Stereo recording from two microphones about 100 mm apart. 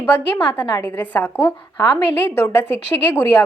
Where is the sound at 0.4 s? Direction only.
15° left (ahead or behind).